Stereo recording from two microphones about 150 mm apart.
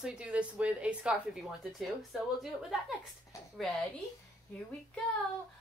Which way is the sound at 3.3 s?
20° left (ahead or behind).